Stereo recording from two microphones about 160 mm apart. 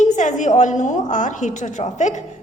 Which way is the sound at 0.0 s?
50° left (ahead or behind).